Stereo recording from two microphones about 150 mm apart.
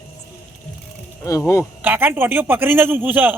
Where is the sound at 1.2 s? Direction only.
20° left (ahead or behind).